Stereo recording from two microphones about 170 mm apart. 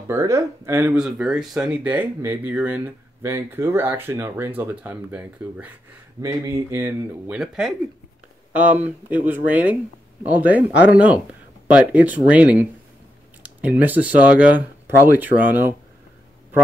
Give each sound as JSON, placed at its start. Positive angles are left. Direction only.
{"t": 0.1, "sound": "speech", "side_deg": -15}
{"t": 7.3, "sound": "speech", "side_deg": -5}